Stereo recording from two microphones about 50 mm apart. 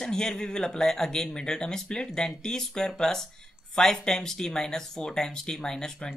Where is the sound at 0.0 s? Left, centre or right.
Centre.